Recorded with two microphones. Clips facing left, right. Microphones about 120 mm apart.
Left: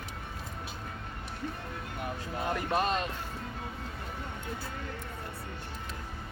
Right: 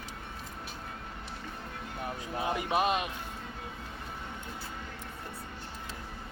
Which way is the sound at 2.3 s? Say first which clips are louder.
Right 1 dB; 10° right (ahead or behind).